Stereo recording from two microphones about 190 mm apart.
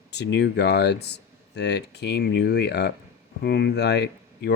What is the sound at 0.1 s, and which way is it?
Speech, 65° left (ahead or behind).